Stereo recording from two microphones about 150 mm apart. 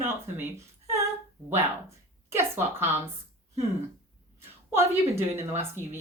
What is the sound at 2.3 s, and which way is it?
Speech, 15° right (ahead or behind).